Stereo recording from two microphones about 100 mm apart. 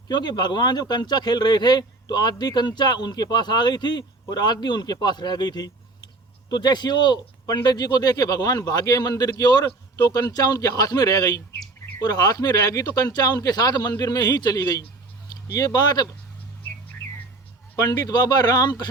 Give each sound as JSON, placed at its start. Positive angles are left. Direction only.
{"t": 0.1, "sound": "speech", "side_deg": 45}
{"t": 17.7, "sound": "speech", "side_deg": 40}